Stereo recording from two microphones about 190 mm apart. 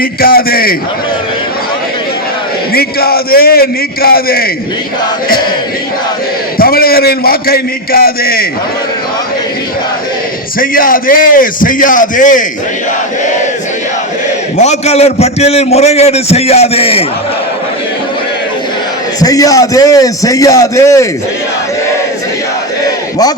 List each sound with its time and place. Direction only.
0.0 s a man's voice: 50° left (ahead or behind)
2.7 s a man's voice: 55° left (ahead or behind)
6.6 s a man's voice: 50° left (ahead or behind)
10.6 s a man's voice: 45° left (ahead or behind)
14.6 s a man's voice: 35° left (ahead or behind)
19.2 s a man's voice: 20° left (ahead or behind)